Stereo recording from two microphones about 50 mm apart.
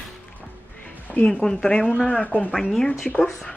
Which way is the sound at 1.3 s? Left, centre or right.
Centre.